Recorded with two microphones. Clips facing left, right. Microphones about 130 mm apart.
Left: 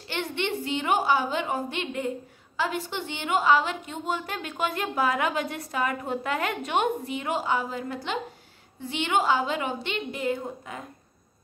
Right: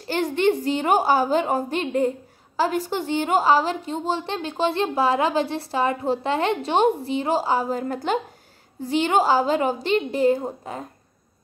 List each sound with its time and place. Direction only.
0.1 s a woman's voice: 40° right (ahead or behind)